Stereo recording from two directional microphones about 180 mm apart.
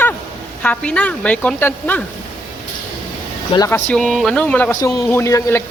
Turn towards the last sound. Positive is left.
turn(degrees=15)  # may be behind; listen again after turning